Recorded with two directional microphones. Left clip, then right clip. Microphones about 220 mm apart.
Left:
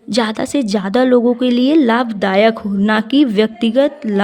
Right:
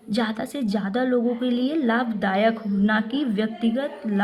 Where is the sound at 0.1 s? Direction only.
45° left (ahead or behind).